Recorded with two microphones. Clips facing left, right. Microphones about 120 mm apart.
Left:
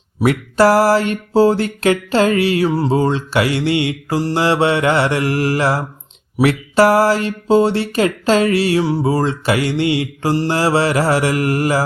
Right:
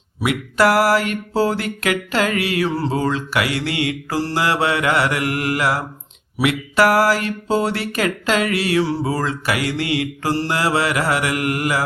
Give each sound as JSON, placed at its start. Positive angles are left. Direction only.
{"t": 0.2, "sound": "speech", "side_deg": 30}